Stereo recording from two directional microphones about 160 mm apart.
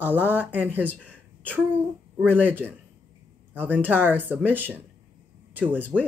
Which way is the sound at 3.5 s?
10° right (ahead or behind).